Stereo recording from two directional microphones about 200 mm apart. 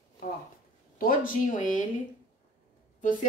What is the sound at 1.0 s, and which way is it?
Speech, 45° left (ahead or behind).